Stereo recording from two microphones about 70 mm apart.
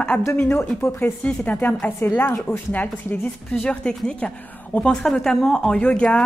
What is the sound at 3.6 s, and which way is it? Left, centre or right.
A woman's voice, centre.